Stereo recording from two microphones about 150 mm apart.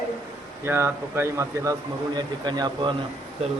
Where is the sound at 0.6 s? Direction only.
15° right (ahead or behind); by 2.9 s 30° right (ahead or behind).